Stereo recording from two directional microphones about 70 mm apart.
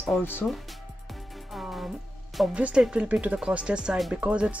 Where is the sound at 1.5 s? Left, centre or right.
Centre.